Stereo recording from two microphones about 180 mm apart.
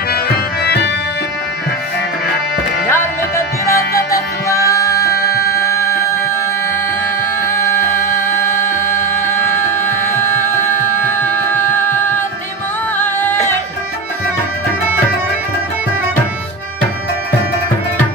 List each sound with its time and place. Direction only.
0.7 s organ: 70° left (ahead or behind)
2.9 s music: 15° left (ahead or behind)
7.4 s music: 15° left (ahead or behind)
12.9 s music: 10° left (ahead or behind)